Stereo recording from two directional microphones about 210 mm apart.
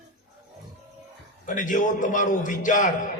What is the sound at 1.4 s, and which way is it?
A man's voice, 40° left (ahead or behind).